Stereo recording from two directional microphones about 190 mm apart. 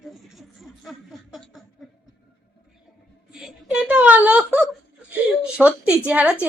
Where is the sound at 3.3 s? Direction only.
5° right (ahead or behind).